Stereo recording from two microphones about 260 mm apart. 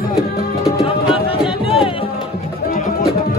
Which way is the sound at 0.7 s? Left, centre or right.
Left.